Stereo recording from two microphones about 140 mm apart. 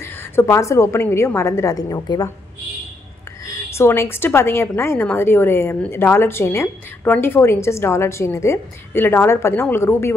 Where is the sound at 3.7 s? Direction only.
20° left (ahead or behind).